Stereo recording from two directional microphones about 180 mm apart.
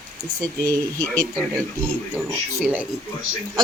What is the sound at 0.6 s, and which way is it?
Speech, 15° right (ahead or behind).